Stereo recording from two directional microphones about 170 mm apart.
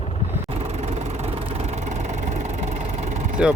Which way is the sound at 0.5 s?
40° right (ahead or behind).